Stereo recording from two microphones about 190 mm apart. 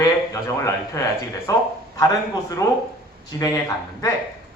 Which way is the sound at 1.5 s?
20° left (ahead or behind).